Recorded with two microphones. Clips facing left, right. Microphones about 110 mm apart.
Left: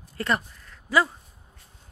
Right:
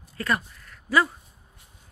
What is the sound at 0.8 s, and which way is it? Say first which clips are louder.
Speech: even; 20° left (ahead or behind).